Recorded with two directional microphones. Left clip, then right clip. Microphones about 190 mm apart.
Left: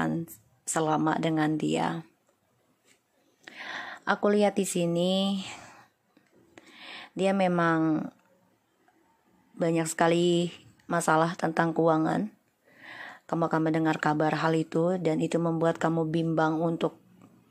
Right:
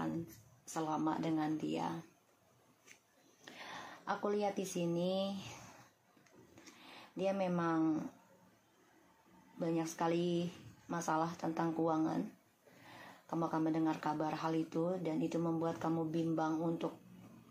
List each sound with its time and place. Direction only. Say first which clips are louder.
0.7 s speech: left 11 dB; 60° left (ahead or behind)
3.4 s a sound: left 10 dB; 40° left (ahead or behind)
3.7 s speech: left 12 dB; 60° left (ahead or behind)
6.8 s speech: left 10 dB; 60° left (ahead or behind)
9.6 s speech: left 11 dB; 60° left (ahead or behind)
12.8 s a sound: left 13 dB; 55° left (ahead or behind)
13.3 s speech: left 10 dB; 65° left (ahead or behind)